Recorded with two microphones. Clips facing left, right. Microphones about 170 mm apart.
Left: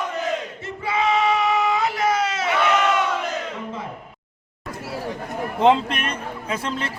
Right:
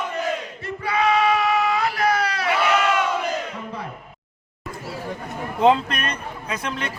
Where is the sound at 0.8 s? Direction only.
20° left (ahead or behind).